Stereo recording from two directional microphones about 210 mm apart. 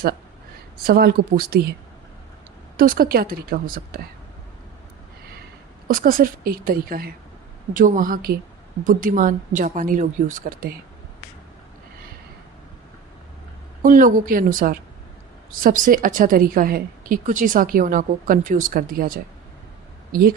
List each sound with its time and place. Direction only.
0.9 s a woman's voice: 45° right (ahead or behind)
2.7 s a woman's voice: 45° right (ahead or behind)
5.9 s a woman's voice: 45° right (ahead or behind)
13.8 s a woman's voice: 40° right (ahead or behind)